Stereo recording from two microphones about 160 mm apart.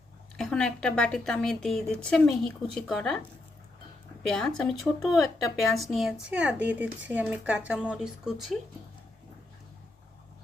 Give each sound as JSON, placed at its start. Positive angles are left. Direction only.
{"t": 0.3, "sound": "a woman's voice", "side_deg": 5}
{"t": 4.2, "sound": "a woman's voice", "side_deg": 5}